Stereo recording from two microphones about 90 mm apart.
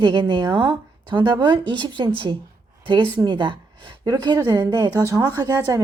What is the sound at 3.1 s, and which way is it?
A woman's voice, 60° right (ahead or behind).